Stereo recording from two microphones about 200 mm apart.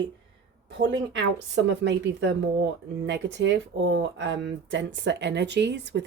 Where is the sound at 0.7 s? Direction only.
65° right (ahead or behind).